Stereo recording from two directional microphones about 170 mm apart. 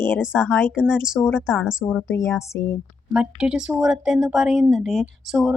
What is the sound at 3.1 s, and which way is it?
A woman's voice, 5° right (ahead or behind).